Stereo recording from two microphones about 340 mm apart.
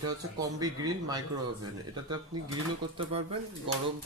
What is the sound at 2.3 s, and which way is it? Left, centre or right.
Speech, centre.